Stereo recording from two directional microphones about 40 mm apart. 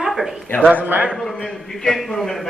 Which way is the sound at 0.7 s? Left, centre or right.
Right.